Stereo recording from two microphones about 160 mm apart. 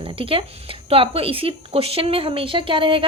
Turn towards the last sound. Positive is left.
turn(degrees=-30)  # may be behind; listen again after turning